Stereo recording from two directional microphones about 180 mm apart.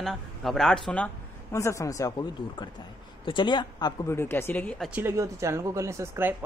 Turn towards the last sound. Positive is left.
turn(degrees=-15)  # may be behind; listen again after turning